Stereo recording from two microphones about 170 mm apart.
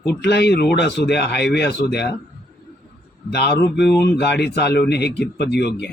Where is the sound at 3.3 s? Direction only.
75° left (ahead or behind).